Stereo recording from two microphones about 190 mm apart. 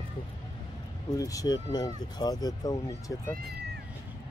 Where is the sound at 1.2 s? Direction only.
20° left (ahead or behind).